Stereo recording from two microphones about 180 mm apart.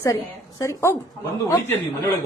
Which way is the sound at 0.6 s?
15° left (ahead or behind).